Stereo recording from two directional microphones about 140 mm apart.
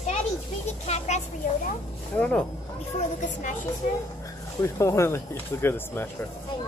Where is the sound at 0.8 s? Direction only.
50° left (ahead or behind).